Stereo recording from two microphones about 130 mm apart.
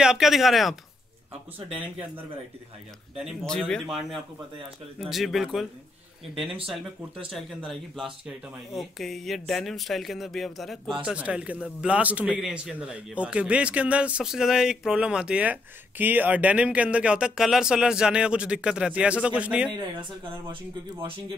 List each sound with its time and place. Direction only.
0.0 s speech: 5° right (ahead or behind)
3.4 s speech: 5° left (ahead or behind)
7.2 s a man's voice: centre (ahead or behind)
19.7 s speech: 30° right (ahead or behind)